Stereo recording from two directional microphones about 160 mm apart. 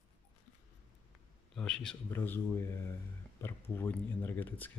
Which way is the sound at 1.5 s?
5° left (ahead or behind).